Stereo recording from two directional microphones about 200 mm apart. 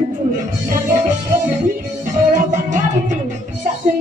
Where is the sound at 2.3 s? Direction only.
40° right (ahead or behind).